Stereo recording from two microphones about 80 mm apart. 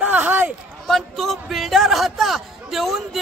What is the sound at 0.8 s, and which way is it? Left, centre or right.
A man's voice, centre.